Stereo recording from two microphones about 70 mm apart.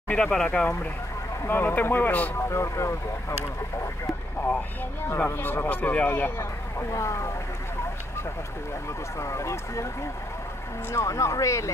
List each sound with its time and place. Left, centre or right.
0.1 s speech: centre
1.4 s speech: left
2.5 s speech: left
5.3 s speech: left
6.9 s speech: left
9.2 s speech: left
10.9 s speech: left